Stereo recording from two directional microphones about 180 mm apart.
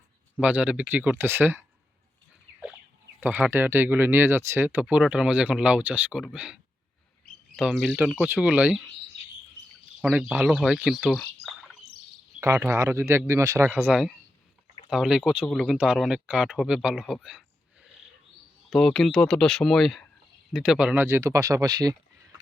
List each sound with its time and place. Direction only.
0.3 s speech: 5° right (ahead or behind)
3.2 s speech: 10° right (ahead or behind)
10.0 s speech: 5° right (ahead or behind)
11.1 s bird: centre (ahead or behind)
12.4 s speech: 15° right (ahead or behind)
17.2 s a sound: 5° right (ahead or behind)
18.7 s speech: centre (ahead or behind); by 21.9 s 20° right (ahead or behind)